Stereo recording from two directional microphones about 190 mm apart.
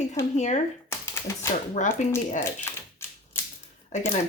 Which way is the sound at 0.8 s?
15° left (ahead or behind).